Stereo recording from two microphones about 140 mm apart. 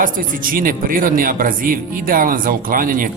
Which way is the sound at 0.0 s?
85° right.